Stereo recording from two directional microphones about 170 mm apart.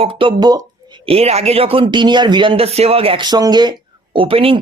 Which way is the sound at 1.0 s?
35° right (ahead or behind).